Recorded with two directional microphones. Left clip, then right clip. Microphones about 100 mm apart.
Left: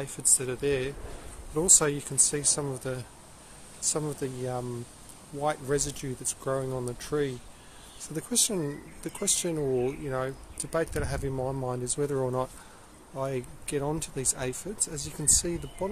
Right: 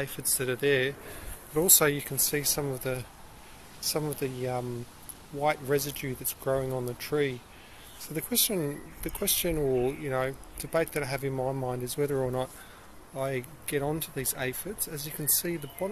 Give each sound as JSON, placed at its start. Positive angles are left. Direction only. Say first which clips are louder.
{"t": 0.0, "sound": "speech", "louder": "left 2 dB", "side_deg": 5}
{"t": 2.0, "sound": "speech", "louder": "left 1 dB", "side_deg": 15}
{"t": 11.8, "sound": "speech", "louder": "right 1 dB", "side_deg": 40}
{"t": 12.1, "sound": "speech", "louder": "left 1 dB", "side_deg": 20}
{"t": 13.1, "sound": "speech", "louder": "even", "side_deg": 35}